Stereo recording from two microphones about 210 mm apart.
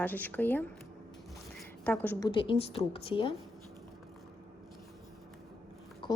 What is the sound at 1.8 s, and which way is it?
Speech, 10° left (ahead or behind).